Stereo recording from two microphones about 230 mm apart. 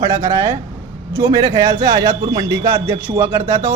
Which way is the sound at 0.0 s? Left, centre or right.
Centre.